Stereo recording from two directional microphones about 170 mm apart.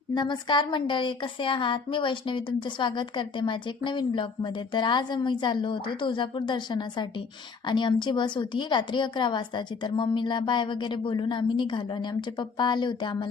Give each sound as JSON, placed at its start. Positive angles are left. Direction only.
{"t": 0.1, "sound": "a woman's voice", "side_deg": 25}